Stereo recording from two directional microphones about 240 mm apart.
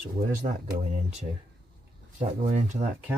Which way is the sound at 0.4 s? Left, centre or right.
Right.